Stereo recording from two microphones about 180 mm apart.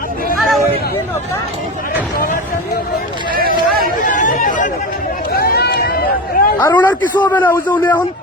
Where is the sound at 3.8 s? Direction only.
50° left (ahead or behind).